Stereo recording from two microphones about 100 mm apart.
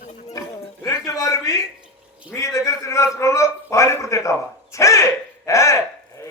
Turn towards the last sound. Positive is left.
turn(degrees=30)  # may be behind; listen again after turning